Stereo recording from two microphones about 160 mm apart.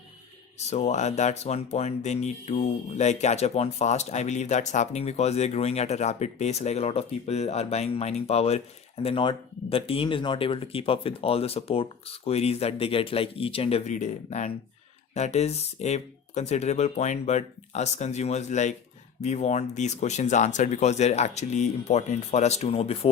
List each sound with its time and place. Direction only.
0.7 s speech: 45° left (ahead or behind)